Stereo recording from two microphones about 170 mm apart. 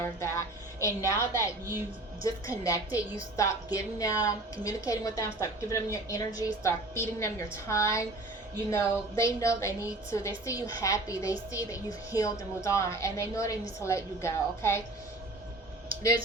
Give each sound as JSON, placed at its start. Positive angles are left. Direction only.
{"t": 0.0, "sound": "a woman's voice", "side_deg": 15}